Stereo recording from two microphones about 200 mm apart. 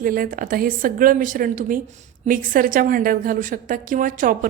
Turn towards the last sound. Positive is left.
turn(degrees=-40)  # may be behind; listen again after turning